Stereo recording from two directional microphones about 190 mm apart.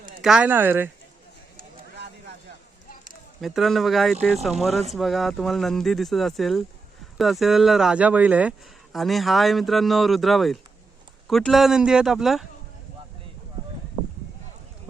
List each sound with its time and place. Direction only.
0.2 s speech: 5° right (ahead or behind)
1.5 s a sound: 60° right (ahead or behind)
3.4 s speech: centre (ahead or behind)